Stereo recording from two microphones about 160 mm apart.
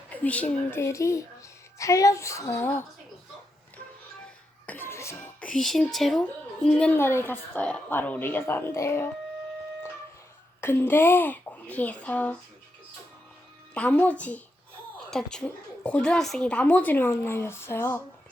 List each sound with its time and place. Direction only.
0.3 s a woman's voice: 10° left (ahead or behind)
4.6 s a child's voice: 10° left (ahead or behind)
10.6 s speech: 15° left (ahead or behind)
13.7 s speech: 10° left (ahead or behind)